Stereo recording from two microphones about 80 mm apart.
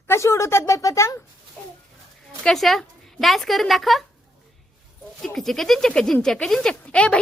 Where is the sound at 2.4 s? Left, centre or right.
Centre.